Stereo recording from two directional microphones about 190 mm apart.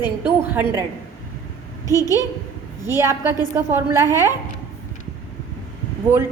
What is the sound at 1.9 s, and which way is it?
Speech, 15° left (ahead or behind).